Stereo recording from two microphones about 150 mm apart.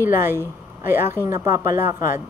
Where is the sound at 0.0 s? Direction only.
15° right (ahead or behind).